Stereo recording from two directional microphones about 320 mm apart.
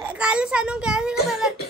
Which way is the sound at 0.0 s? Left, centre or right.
Centre.